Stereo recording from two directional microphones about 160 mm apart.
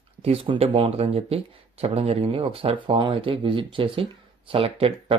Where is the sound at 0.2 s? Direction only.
35° right (ahead or behind).